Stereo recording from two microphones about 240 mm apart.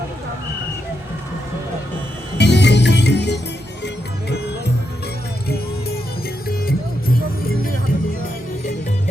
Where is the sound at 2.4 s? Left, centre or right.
Left.